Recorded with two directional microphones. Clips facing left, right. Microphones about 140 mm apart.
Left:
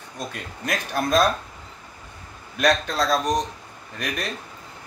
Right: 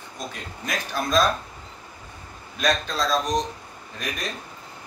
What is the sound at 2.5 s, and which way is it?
Speech, 60° left (ahead or behind).